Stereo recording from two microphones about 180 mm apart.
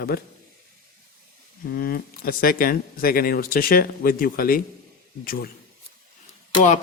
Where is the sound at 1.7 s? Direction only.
55° left (ahead or behind).